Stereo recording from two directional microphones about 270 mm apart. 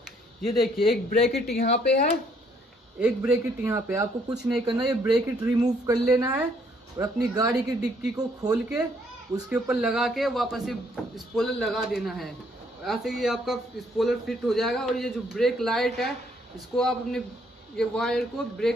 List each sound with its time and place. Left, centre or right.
0.6 s a man's voice: centre
1.5 s speech: left
3.0 s speech: centre
4.6 s a man's voice: centre